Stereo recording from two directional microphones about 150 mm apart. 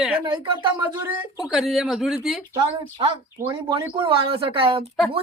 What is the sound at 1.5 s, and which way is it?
Speech, centre (ahead or behind).